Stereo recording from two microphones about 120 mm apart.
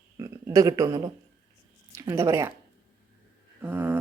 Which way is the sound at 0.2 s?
30° right (ahead or behind).